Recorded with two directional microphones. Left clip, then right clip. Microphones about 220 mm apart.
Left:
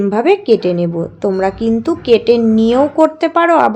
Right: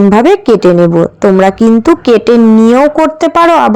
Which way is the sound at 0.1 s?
25° right (ahead or behind).